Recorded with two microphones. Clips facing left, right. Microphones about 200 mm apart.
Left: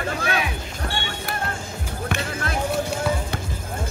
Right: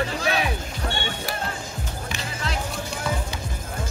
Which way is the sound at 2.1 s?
55° left (ahead or behind).